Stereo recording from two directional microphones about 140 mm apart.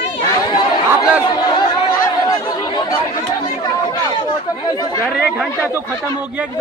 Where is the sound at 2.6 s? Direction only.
30° left (ahead or behind).